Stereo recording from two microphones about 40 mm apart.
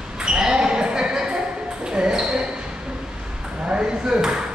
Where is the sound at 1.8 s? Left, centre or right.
Right.